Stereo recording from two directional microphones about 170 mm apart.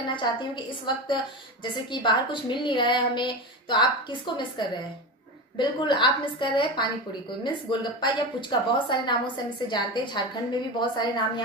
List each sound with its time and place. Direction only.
0.8 s a woman's voice: 25° left (ahead or behind)